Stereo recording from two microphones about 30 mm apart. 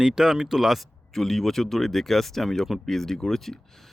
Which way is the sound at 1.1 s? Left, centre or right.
Centre.